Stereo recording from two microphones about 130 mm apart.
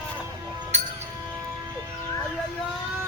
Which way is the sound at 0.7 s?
60° right (ahead or behind).